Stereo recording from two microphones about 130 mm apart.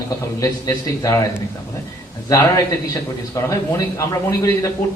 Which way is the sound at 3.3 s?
25° left (ahead or behind).